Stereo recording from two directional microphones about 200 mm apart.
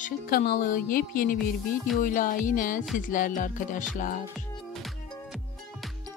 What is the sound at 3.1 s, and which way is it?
Music, 40° left (ahead or behind).